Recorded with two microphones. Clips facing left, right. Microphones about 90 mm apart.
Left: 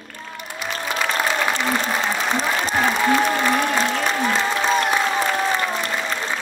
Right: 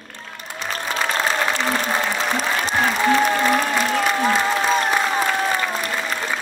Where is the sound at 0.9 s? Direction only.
35° right (ahead or behind).